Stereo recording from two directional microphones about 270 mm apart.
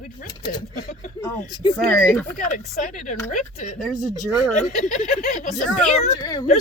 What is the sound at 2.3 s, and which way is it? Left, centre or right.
Speech, left.